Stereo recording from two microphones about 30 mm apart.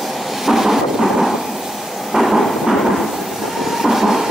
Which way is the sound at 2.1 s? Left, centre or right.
Centre.